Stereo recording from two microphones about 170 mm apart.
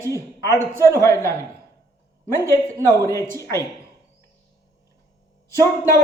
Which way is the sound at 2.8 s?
20° right (ahead or behind).